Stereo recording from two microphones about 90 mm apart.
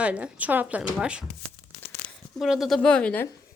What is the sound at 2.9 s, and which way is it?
Speech, 10° left (ahead or behind).